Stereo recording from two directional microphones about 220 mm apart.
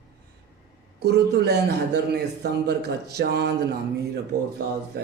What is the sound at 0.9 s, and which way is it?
Speech, 50° right (ahead or behind).